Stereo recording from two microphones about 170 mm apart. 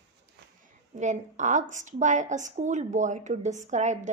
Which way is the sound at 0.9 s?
45° right (ahead or behind).